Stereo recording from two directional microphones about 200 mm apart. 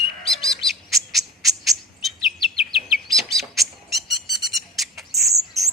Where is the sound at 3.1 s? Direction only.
Centre (ahead or behind).